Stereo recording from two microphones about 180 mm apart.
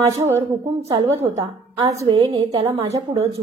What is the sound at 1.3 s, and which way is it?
Speech, 20° right (ahead or behind).